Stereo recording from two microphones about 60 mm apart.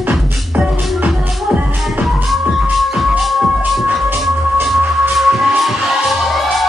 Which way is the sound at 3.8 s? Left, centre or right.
Right.